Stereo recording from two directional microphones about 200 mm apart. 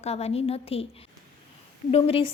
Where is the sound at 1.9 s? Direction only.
30° left (ahead or behind).